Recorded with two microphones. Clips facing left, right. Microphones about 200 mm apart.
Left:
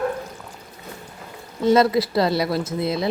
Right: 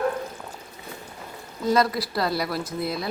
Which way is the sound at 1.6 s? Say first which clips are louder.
Left 6 dB; 25° left (ahead or behind).